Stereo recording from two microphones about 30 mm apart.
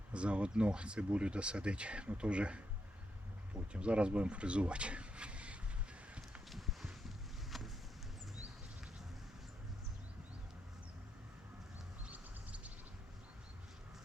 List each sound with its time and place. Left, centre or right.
0.1 s speech: right
6.5 s a sound: centre
7.5 s vehicle: centre
12.1 s music: right